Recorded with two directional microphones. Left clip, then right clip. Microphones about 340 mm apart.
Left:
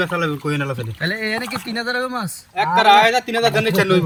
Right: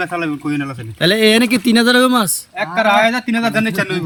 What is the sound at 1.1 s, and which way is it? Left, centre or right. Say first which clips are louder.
Speech: right 12 dB; right.